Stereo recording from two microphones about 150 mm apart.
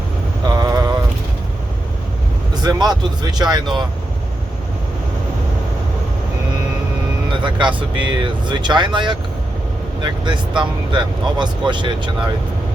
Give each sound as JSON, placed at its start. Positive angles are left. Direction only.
{"t": 0.4, "sound": "a sound", "side_deg": -25}
{"t": 2.6, "sound": "speech", "side_deg": -25}
{"t": 7.4, "sound": "speech", "side_deg": -30}